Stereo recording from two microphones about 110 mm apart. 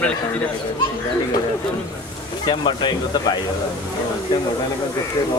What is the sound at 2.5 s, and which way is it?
Speech, 45° left (ahead or behind).